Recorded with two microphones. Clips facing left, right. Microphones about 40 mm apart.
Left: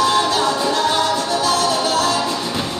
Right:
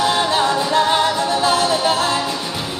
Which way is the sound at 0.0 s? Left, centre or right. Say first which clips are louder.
Even; right.